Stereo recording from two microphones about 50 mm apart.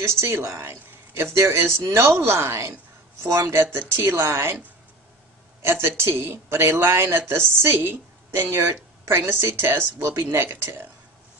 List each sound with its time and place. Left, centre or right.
0.0 s speech: right
5.6 s speech: right
10.2 s speech: right